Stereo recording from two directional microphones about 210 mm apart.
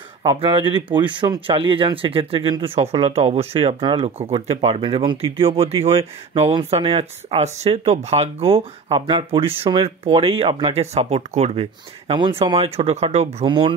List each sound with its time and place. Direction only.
0.2 s speech: 25° right (ahead or behind)